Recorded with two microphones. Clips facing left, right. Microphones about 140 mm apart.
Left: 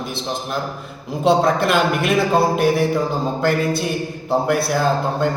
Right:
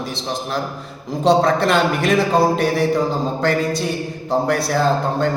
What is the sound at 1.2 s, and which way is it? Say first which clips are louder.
Speech: right 1 dB; 5° left (ahead or behind).